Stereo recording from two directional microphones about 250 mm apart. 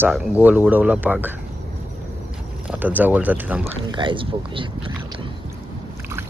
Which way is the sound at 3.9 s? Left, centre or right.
Centre.